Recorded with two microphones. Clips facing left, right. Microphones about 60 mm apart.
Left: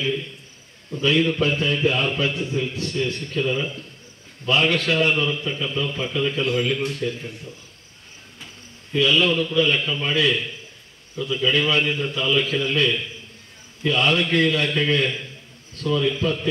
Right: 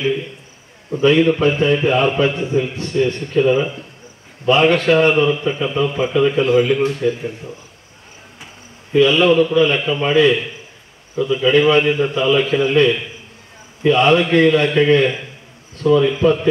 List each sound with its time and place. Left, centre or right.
0.0 s a man's voice: centre
8.9 s a man's voice: right